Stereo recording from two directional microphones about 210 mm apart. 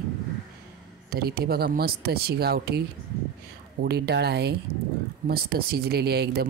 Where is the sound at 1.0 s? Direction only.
45° right (ahead or behind).